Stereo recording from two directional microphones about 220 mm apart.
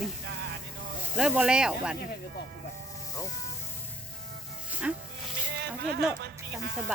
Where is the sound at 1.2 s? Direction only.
5° right (ahead or behind).